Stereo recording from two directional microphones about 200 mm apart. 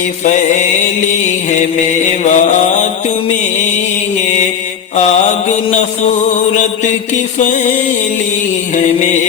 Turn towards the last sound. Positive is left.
turn(degrees=40)  # may be behind; listen again after turning